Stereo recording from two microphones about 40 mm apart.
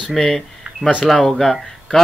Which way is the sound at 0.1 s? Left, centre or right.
Centre.